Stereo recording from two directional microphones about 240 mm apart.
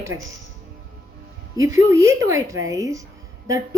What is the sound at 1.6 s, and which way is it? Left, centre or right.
Speech, centre.